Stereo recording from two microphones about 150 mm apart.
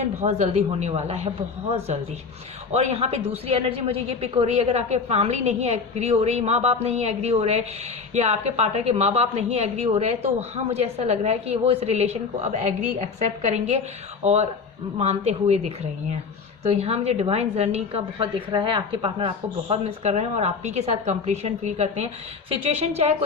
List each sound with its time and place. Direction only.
0.0 s a woman's voice: 45° right (ahead or behind)
2.7 s a woman's voice: 45° right (ahead or behind)
14.9 s a woman's voice: 45° right (ahead or behind)